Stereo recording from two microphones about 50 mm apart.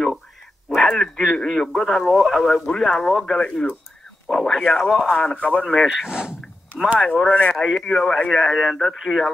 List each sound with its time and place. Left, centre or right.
0.7 s speech: centre
2.1 s speech: centre
2.4 s speech: centre
3.3 s speech: centre
5.9 s speech: centre
7.2 s speech: left
7.5 s speech: centre
7.8 s speech: centre